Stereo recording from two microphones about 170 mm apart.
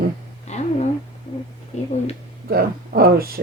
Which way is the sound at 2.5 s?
60° right (ahead or behind).